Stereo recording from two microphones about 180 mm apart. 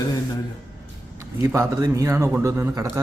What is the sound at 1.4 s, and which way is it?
A man's voice, 15° right (ahead or behind).